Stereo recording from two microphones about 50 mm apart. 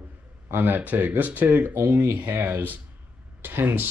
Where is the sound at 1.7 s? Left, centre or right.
Right.